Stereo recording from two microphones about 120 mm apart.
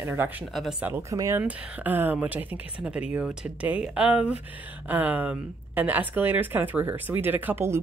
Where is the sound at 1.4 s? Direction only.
15° right (ahead or behind).